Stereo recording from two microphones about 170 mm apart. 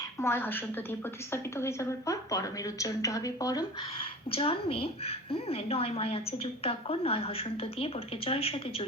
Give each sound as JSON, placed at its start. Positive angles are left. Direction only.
{"t": 0.2, "sound": "a woman's voice", "side_deg": 15}
{"t": 4.4, "sound": "a woman's voice", "side_deg": 35}